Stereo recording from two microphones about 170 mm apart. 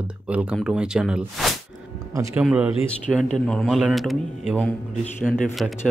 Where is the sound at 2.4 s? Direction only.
5° right (ahead or behind).